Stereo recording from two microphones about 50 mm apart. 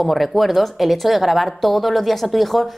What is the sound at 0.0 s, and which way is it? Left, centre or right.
A woman's voice, centre.